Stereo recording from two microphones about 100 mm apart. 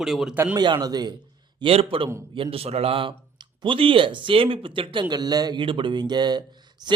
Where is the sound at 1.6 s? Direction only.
70° right (ahead or behind).